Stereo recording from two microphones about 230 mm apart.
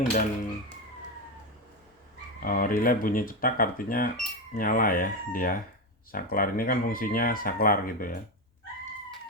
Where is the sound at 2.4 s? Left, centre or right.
Left.